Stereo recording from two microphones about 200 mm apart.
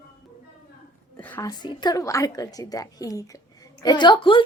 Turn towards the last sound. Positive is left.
turn(degrees=25)  # may be behind; listen again after turning